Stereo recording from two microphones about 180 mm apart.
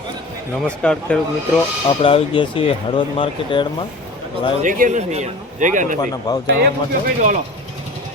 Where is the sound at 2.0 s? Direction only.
30° left (ahead or behind).